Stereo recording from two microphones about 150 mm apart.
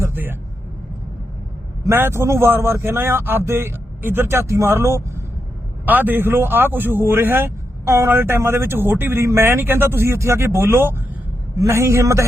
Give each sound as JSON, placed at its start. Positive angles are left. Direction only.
{"t": 0.0, "sound": "vehicle", "side_deg": -15}
{"t": 1.9, "sound": "a man's voice", "side_deg": -15}